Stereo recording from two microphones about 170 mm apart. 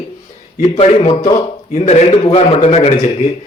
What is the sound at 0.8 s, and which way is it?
A man's voice, 35° left (ahead or behind).